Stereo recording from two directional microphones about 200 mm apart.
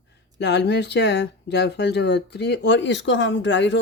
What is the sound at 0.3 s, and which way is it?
Speech, 60° left (ahead or behind).